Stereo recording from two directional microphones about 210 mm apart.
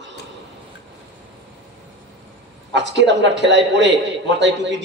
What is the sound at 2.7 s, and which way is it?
A man's voice, 55° right (ahead or behind).